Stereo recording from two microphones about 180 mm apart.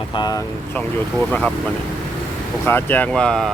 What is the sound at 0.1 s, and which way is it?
Speech, 25° left (ahead or behind).